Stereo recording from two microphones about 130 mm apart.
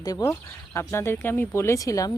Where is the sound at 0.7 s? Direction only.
20° left (ahead or behind).